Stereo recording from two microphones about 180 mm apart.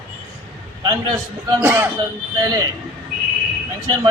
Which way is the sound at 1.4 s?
15° right (ahead or behind).